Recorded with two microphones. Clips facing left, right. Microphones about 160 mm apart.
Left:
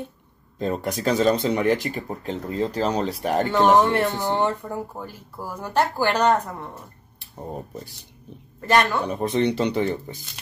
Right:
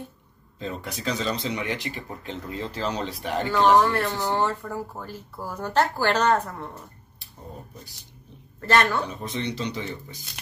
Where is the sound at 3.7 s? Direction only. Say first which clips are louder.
Left 2 dB; 25° left (ahead or behind).